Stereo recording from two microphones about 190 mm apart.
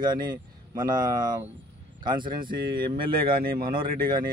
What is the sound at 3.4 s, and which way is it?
Speech, 50° right (ahead or behind).